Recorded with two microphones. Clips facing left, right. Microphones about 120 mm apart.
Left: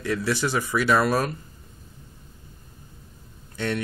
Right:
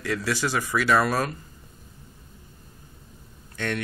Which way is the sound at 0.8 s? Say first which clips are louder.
Even; 5° left (ahead or behind).